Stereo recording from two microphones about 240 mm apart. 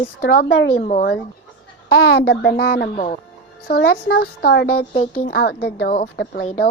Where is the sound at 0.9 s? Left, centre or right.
Left.